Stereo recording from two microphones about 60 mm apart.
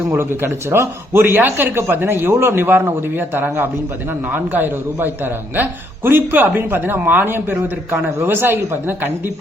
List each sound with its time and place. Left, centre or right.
0.1 s a man's voice: right